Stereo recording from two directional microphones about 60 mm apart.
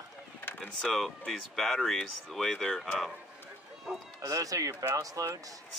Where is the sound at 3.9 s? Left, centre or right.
Centre.